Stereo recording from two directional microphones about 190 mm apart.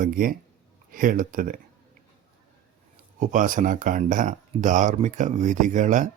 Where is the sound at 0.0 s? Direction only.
50° right (ahead or behind).